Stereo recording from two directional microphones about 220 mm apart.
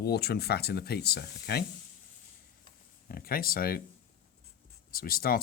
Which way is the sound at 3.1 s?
40° left (ahead or behind).